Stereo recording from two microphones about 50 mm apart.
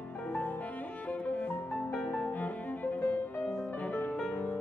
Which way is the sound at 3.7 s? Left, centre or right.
Left.